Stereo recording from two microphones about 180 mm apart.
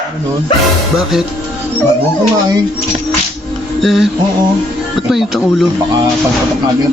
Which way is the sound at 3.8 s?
Centre (ahead or behind).